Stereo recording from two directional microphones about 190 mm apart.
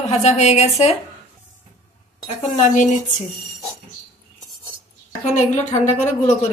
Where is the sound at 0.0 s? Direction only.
35° left (ahead or behind).